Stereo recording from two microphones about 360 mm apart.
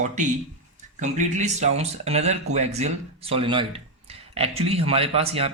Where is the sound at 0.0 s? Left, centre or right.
Centre.